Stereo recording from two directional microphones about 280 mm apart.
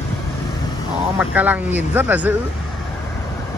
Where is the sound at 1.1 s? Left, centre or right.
Centre.